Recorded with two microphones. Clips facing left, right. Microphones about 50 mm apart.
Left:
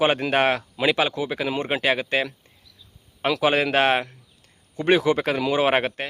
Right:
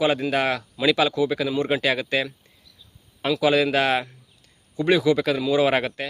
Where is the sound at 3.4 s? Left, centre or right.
Left.